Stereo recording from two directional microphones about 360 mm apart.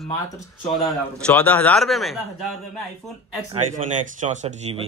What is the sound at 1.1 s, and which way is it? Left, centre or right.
A man's voice, centre.